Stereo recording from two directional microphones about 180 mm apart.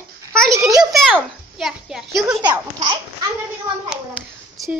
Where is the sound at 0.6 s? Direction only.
20° right (ahead or behind).